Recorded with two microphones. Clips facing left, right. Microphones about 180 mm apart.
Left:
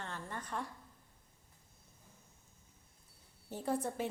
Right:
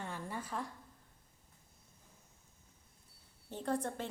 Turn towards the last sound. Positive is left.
turn(degrees=5)  # may be behind; listen again after turning